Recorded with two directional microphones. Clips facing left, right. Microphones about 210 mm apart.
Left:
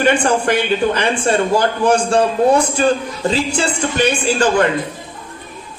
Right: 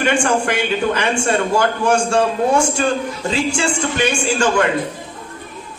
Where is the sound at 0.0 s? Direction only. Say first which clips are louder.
Left 2 dB; 35° left (ahead or behind).